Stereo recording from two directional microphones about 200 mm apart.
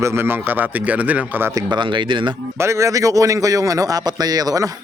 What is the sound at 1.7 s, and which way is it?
Speech, 25° right (ahead or behind).